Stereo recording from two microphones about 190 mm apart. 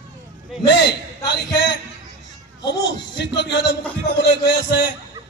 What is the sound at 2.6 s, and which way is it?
A man's voice, 65° left (ahead or behind).